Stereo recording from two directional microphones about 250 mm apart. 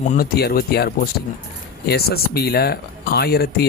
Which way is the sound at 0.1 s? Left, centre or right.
Left.